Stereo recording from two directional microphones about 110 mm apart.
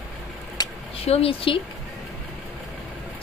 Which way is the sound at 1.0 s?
65° left (ahead or behind).